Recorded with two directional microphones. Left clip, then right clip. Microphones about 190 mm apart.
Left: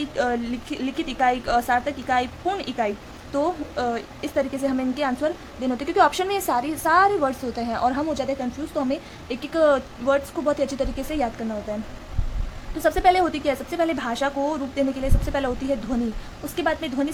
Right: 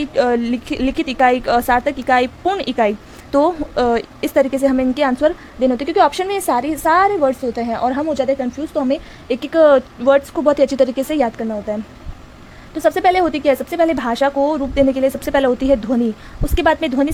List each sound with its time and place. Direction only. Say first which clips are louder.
0.0 s a woman's voice: right 8 dB; 35° right (ahead or behind)
12.8 s a woman's voice: right 5 dB; 35° right (ahead or behind)